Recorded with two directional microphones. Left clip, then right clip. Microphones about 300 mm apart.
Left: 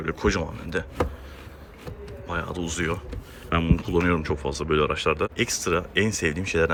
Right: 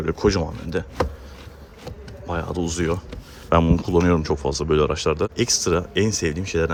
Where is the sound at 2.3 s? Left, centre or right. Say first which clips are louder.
Right 4 dB; centre.